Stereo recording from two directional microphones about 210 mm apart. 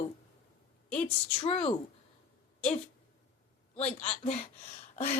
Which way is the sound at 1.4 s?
30° left (ahead or behind).